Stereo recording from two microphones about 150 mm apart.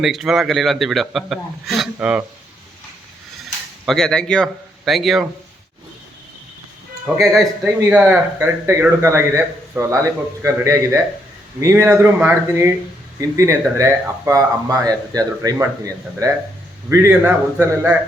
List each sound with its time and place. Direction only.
0.0 s a man's voice: centre (ahead or behind)
3.8 s a man's voice: 5° left (ahead or behind)
7.0 s a man's voice: centre (ahead or behind)